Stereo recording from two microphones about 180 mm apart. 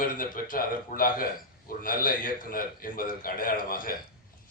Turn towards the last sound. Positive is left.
turn(degrees=50)  # may be behind; listen again after turning